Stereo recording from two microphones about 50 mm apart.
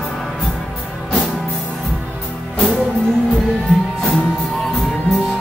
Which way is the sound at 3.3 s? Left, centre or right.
Centre.